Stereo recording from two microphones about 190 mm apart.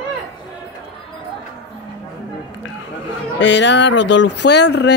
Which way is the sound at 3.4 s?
70° left (ahead or behind).